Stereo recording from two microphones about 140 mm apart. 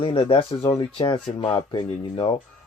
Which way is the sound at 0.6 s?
25° left (ahead or behind).